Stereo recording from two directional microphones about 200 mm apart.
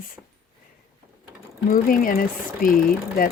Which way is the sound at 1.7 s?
45° left (ahead or behind).